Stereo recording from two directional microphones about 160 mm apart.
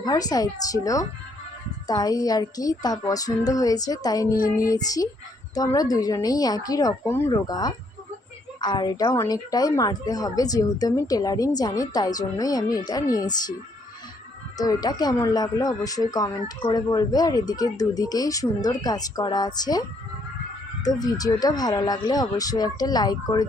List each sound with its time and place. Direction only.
0.0 s speech: 25° left (ahead or behind)
14.6 s speech: 25° left (ahead or behind)
20.8 s speech: 25° left (ahead or behind)